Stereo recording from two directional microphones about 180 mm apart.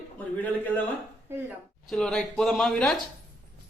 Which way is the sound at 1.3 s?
10° right (ahead or behind).